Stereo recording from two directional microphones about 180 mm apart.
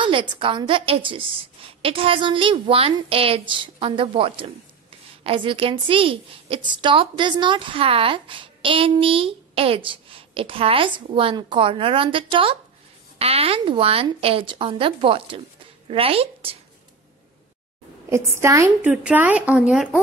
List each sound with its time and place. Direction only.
0.0 s a woman's voice: 25° right (ahead or behind)
18.1 s a woman's voice: 15° right (ahead or behind)